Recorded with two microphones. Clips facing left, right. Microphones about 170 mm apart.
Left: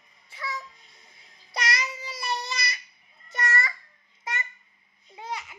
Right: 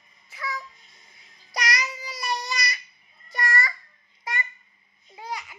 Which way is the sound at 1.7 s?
25° left (ahead or behind).